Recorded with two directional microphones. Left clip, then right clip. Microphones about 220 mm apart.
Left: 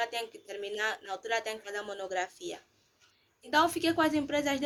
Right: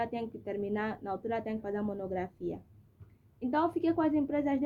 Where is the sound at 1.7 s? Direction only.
35° left (ahead or behind).